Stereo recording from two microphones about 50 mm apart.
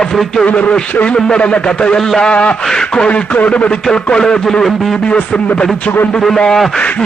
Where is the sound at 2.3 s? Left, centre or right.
Left.